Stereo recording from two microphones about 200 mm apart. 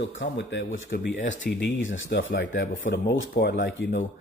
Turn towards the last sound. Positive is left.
turn(degrees=65)  # may be behind; listen again after turning